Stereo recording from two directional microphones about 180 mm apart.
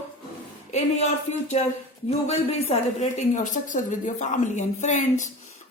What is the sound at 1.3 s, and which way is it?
A woman's voice, 40° left (ahead or behind).